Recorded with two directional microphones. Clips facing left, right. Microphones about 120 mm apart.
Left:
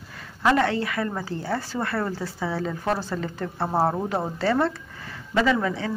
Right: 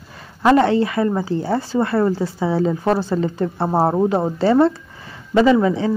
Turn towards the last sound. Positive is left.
turn(degrees=-20)  # may be behind; listen again after turning